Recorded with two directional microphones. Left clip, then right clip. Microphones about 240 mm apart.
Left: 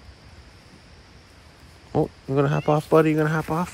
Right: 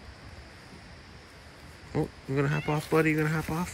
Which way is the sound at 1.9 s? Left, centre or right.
Centre.